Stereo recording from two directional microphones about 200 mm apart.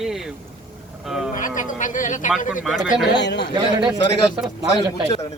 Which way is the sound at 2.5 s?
5° right (ahead or behind).